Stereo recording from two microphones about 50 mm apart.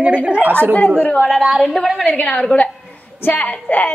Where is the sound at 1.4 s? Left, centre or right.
Centre.